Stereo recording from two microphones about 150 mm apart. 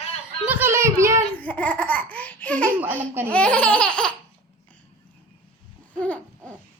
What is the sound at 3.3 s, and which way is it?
Laughter, 10° left (ahead or behind).